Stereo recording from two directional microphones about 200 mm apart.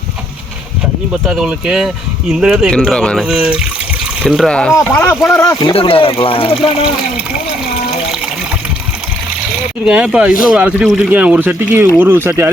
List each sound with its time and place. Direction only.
1.1 s speech: centre (ahead or behind); by 6.6 s 25° left (ahead or behind)
9.8 s speech: 5° right (ahead or behind)